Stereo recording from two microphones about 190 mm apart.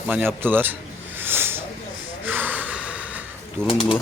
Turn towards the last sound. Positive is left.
turn(degrees=30)  # may be behind; listen again after turning